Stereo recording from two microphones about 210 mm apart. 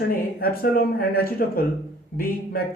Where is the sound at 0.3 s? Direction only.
45° left (ahead or behind).